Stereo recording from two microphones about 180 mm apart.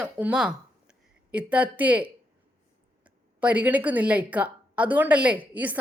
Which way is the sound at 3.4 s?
10° right (ahead or behind).